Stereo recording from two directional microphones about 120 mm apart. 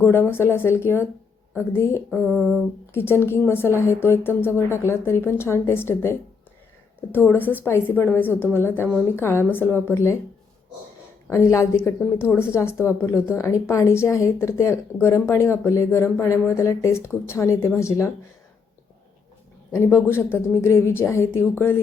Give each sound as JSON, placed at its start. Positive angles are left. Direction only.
{"t": 0.0, "sound": "a woman's voice", "side_deg": 20}
{"t": 2.0, "sound": "a sound", "side_deg": 5}
{"t": 2.9, "sound": "a woman's voice", "side_deg": 20}
{"t": 11.3, "sound": "a woman's voice", "side_deg": 25}
{"t": 19.8, "sound": "a woman's voice", "side_deg": 25}